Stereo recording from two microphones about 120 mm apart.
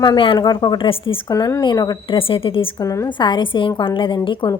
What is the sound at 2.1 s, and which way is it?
Speech, 50° left (ahead or behind).